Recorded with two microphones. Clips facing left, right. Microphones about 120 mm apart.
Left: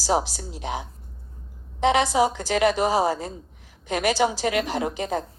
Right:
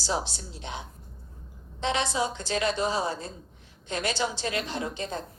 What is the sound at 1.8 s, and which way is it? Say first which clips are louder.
A woman's voice: left 8 dB; 90° left.